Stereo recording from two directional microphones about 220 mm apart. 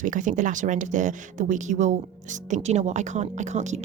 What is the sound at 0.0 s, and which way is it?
A woman's voice, 35° right (ahead or behind).